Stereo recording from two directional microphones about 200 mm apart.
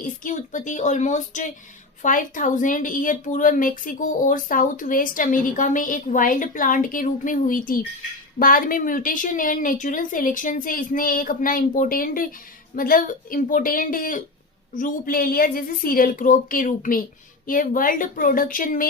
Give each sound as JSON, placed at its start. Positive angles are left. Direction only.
{"t": 0.3, "sound": "a woman's voice", "side_deg": 40}